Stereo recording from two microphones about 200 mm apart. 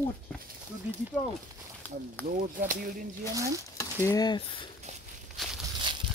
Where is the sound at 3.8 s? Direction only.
20° left (ahead or behind).